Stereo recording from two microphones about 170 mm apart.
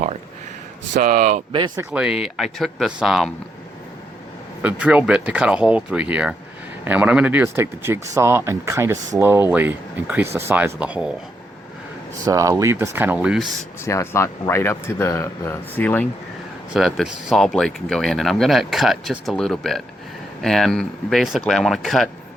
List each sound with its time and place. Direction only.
0.9 s speech: 55° right (ahead or behind)
1.5 s speech: 25° right (ahead or behind)
1.8 s speech: 5° right (ahead or behind)
4.6 s speech: 10° right (ahead or behind)
12.2 s speech: 20° right (ahead or behind)
13.8 s speech: 15° left (ahead or behind)
16.7 s speech: centre (ahead or behind)